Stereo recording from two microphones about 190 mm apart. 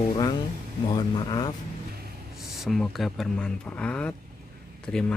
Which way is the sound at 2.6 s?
Centre (ahead or behind).